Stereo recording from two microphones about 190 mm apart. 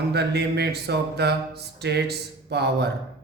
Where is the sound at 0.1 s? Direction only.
60° right (ahead or behind).